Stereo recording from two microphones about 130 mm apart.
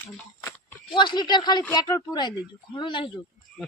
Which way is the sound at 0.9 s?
35° left (ahead or behind).